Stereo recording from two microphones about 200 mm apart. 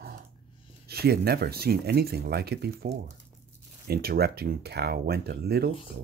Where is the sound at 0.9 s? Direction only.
55° right (ahead or behind).